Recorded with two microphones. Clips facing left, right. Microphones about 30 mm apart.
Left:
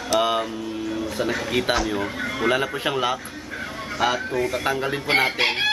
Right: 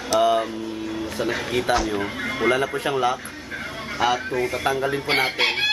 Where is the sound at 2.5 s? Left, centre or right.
Centre.